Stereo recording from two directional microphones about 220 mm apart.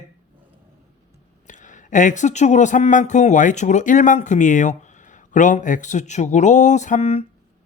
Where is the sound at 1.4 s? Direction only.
35° left (ahead or behind).